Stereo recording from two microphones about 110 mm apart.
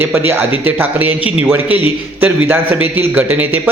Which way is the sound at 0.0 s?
20° right (ahead or behind).